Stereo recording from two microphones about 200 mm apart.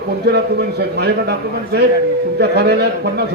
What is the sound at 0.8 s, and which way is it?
A man's voice, 55° right (ahead or behind).